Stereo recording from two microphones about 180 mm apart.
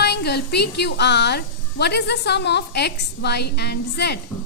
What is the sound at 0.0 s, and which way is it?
A woman's voice, 65° left (ahead or behind).